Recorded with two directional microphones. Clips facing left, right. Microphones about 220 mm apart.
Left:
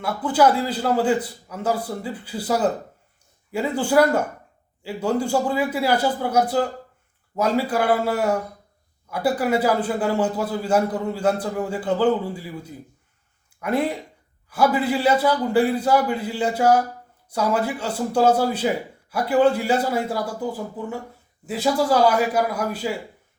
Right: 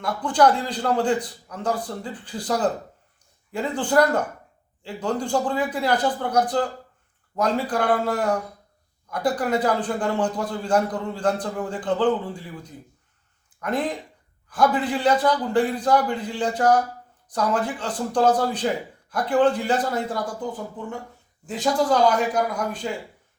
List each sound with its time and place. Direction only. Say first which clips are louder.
0.0 s a man's voice: left 1 dB; 5° left (ahead or behind)